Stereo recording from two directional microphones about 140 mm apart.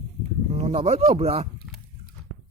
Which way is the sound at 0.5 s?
45° right (ahead or behind).